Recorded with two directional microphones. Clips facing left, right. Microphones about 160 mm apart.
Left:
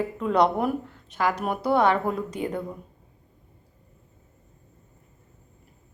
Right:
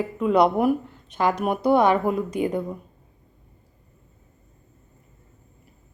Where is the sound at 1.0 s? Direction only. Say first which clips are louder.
Right 4 dB; 20° right (ahead or behind).